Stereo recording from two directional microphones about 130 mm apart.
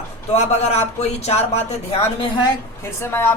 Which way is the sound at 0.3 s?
55° left (ahead or behind).